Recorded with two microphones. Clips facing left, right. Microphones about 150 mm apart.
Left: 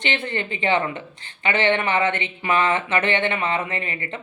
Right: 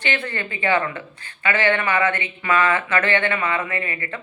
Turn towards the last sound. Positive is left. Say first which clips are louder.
# right 1 dB
turn(degrees=25)  # may be behind; listen again after turning